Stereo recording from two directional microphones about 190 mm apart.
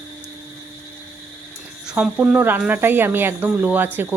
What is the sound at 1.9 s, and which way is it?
Speech, 5° right (ahead or behind).